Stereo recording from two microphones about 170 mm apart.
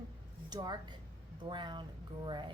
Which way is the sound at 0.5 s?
25° right (ahead or behind).